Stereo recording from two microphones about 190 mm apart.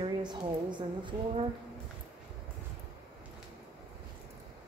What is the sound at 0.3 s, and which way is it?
A woman's voice, 25° right (ahead or behind).